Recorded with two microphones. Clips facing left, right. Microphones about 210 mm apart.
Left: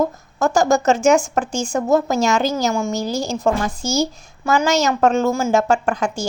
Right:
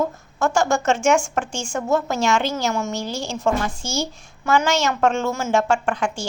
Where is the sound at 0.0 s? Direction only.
40° left (ahead or behind).